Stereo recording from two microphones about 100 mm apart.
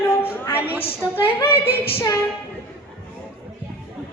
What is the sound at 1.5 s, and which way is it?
Female singing, 65° left (ahead or behind).